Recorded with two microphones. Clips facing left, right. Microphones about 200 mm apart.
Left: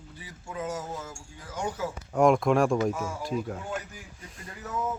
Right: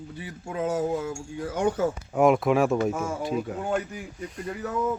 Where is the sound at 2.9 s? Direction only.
50° right (ahead or behind).